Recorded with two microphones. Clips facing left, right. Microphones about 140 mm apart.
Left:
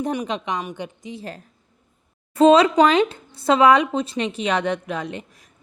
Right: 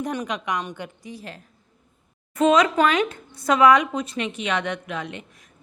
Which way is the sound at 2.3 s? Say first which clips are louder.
Left 5 dB; 30° left (ahead or behind).